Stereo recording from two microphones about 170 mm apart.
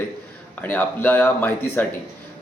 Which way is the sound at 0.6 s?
10° left (ahead or behind).